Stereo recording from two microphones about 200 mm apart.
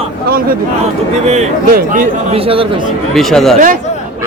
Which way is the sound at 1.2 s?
35° right (ahead or behind).